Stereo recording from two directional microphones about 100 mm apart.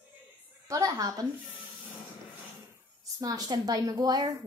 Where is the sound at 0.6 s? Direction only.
35° right (ahead or behind).